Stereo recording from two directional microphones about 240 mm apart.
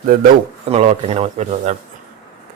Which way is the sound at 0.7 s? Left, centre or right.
Right.